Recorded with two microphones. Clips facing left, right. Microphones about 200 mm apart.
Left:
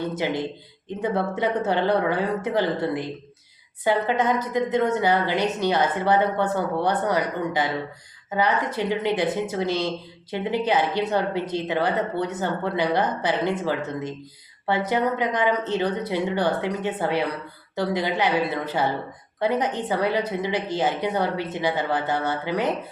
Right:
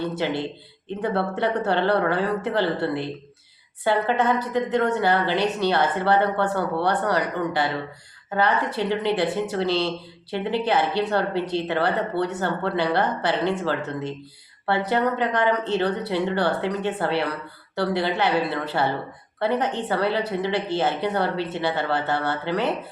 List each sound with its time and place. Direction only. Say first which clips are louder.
0.0 s a woman's voice: even; 15° left (ahead or behind)